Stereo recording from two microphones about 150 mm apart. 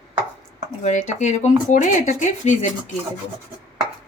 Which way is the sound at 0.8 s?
50° left (ahead or behind).